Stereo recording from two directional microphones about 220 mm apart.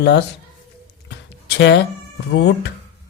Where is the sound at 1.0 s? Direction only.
50° left (ahead or behind).